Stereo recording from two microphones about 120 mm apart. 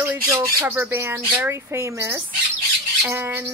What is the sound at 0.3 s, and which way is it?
Speech, 25° right (ahead or behind).